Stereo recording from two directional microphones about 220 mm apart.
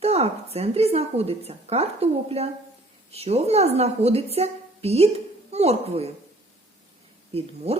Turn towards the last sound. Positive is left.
turn(degrees=-25)  # may be behind; listen again after turning